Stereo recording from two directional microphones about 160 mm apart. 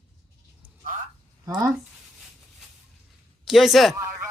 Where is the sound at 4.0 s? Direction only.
15° right (ahead or behind).